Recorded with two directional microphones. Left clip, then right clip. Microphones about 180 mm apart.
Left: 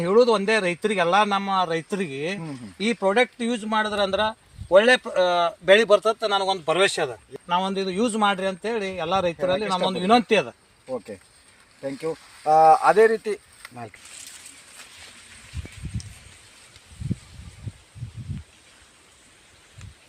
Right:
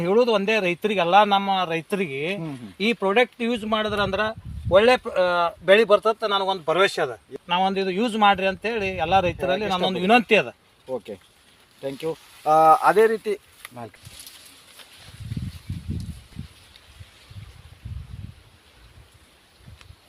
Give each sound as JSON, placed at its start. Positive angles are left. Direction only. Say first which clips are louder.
{"t": 0.0, "sound": "speech", "louder": "left 1 dB", "side_deg": -10}
{"t": 7.3, "sound": "a man's voice", "louder": "right 2 dB", "side_deg": -10}
{"t": 11.8, "sound": "speech", "louder": "even", "side_deg": -65}